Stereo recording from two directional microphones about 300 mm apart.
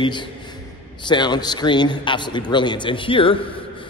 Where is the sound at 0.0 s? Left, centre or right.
Centre.